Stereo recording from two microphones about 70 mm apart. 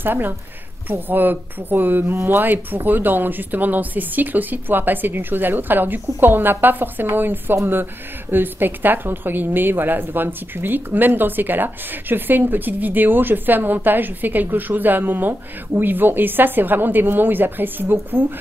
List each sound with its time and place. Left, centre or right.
0.0 s speech: right